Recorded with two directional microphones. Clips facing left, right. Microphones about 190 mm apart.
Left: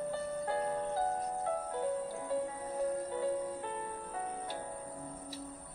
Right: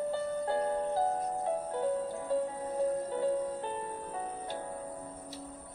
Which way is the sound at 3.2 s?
30° right (ahead or behind).